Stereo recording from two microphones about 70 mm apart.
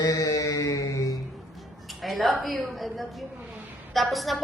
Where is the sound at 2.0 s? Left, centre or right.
Centre.